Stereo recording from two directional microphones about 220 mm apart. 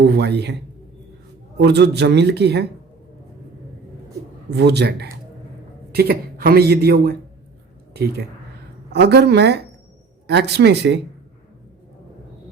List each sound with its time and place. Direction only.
0.0 s a man's voice: 50° right (ahead or behind)
1.5 s a man's voice: 50° right (ahead or behind)
4.5 s a man's voice: 50° right (ahead or behind)